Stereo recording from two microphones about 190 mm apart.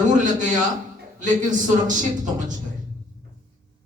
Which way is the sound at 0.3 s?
40° right (ahead or behind).